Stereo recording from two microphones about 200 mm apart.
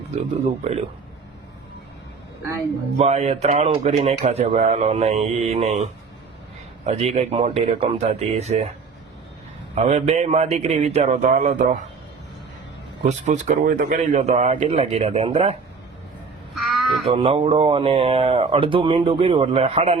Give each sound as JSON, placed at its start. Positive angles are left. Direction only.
{"t": 0.2, "sound": "a man's voice", "side_deg": -30}
{"t": 3.0, "sound": "a man's voice", "side_deg": -35}
{"t": 9.7, "sound": "a man's voice", "side_deg": -35}
{"t": 13.0, "sound": "a man's voice", "side_deg": -35}
{"t": 16.6, "sound": "a sound", "side_deg": 0}
{"t": 17.1, "sound": "speech", "side_deg": -30}